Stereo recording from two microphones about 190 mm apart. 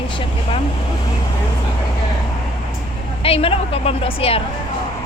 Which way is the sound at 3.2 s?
30° left (ahead or behind).